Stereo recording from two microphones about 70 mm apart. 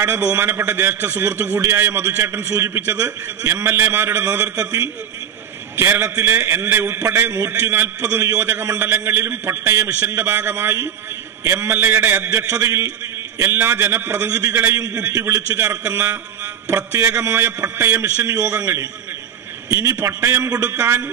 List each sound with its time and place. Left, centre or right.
0.2 s a man's voice: right
0.5 s a man's voice: right
3.6 s a man's voice: right
4.4 s a man's voice: right
5.8 s a man's voice: right
12.3 s a man's voice: right
14.2 s a man's voice: right
14.5 s a man's voice: right
15.0 s a man's voice: right
19.7 s a man's voice: right
20.4 s a man's voice: right